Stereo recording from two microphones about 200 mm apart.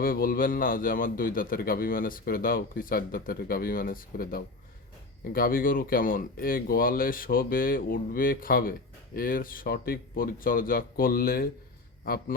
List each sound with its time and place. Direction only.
0.0 s a man's voice: 45° left (ahead or behind)